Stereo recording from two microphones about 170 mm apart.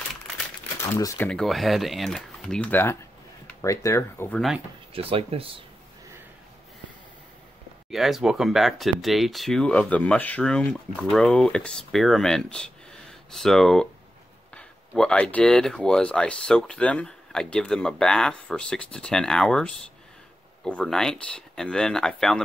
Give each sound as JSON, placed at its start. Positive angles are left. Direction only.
{"t": 0.8, "sound": "speech", "side_deg": 20}
{"t": 4.9, "sound": "speech", "side_deg": -35}
{"t": 7.9, "sound": "speech", "side_deg": 0}